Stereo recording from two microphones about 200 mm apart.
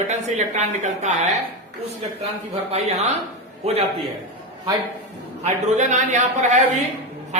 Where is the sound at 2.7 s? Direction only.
35° right (ahead or behind).